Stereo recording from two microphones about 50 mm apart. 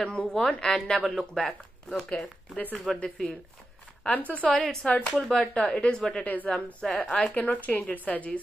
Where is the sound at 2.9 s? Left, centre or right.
Centre.